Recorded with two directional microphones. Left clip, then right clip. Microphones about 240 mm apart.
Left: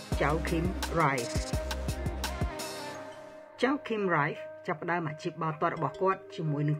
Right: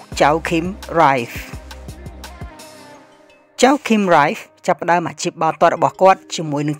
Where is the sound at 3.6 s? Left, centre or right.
Right.